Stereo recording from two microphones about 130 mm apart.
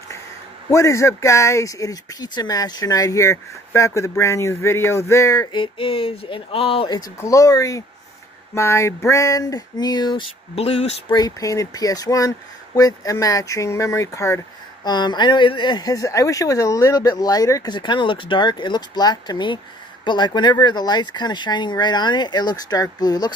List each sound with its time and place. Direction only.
0.7 s speech: 25° left (ahead or behind)
5.6 s a sound: 45° left (ahead or behind)
6.9 s speech: 30° left (ahead or behind)
10.5 s a sound: 50° left (ahead or behind)
11.1 s speech: 30° left (ahead or behind)
14.9 s speech: 35° left (ahead or behind)
17.7 s speech: 35° left (ahead or behind)